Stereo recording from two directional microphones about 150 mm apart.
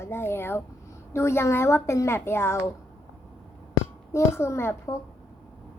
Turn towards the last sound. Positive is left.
turn(degrees=20)  # may be behind; listen again after turning